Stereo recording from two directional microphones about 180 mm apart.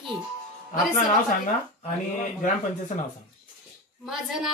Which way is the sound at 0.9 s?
40° left (ahead or behind).